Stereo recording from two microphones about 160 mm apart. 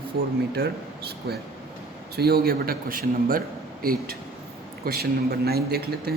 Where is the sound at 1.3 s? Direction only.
80° right; by 3.4 s 65° right (ahead or behind).